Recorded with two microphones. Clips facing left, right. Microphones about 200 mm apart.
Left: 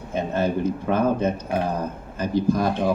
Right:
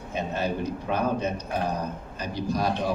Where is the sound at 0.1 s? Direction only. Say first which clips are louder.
Left 5 dB; 50° left (ahead or behind).